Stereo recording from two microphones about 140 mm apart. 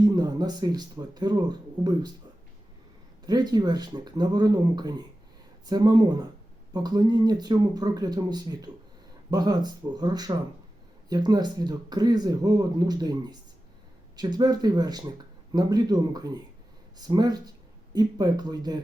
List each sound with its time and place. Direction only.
0.0 s speech: 30° right (ahead or behind)
3.2 s speech: 30° right (ahead or behind)